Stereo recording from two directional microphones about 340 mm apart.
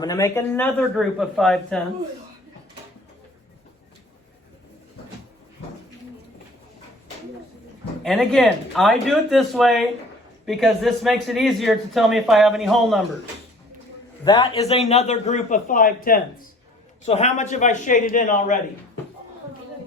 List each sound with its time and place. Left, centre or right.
0.0 s a man's voice: centre
8.0 s a man's voice: centre
14.3 s a man's voice: centre